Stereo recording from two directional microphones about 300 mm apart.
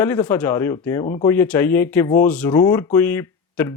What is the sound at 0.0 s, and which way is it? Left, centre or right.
Speech, centre.